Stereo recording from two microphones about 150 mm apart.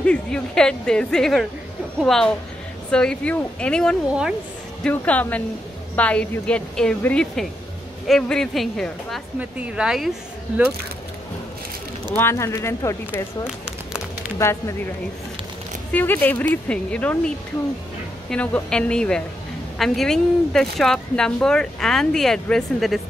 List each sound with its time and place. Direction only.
0.0 s a woman's voice: 5° left (ahead or behind)
4.1 s speech: 5° right (ahead or behind)
4.8 s a woman's voice: 10° left (ahead or behind)
9.4 s speech: 10° right (ahead or behind)
12.2 s a woman's voice: 20° left (ahead or behind)
15.9 s a woman's voice: 10° left (ahead or behind)
18.3 s speech: 5° left (ahead or behind)